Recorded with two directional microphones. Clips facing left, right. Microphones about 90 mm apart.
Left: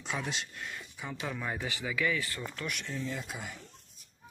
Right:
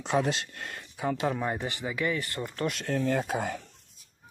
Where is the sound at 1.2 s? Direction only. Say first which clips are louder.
Right 3 dB; 40° right (ahead or behind).